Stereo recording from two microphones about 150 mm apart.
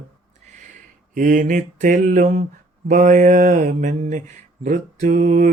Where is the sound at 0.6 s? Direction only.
60° right (ahead or behind).